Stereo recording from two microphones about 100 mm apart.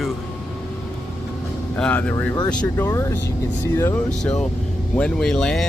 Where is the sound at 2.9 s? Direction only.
30° left (ahead or behind).